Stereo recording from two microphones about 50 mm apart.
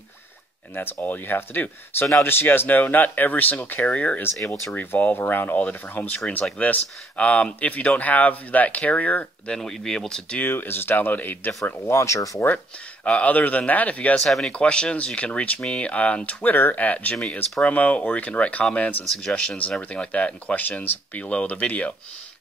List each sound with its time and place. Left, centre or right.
0.7 s speech: left
3.8 s speech: left
4.7 s speech: left
6.0 s speech: left
9.6 s speech: centre
10.4 s speech: left
11.9 s speech: left
12.4 s speech: left
13.2 s speech: left
14.2 s speech: centre
14.5 s speech: left
16.4 s speech: left
19.0 s speech: centre
20.0 s speech: left